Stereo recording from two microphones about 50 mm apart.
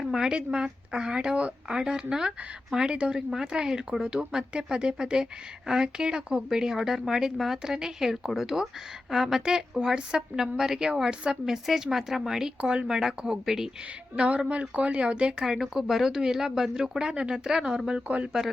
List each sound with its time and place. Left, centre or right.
0.0 s speech: centre
11.4 s speech: centre
14.2 s speech: right
15.4 s speech: centre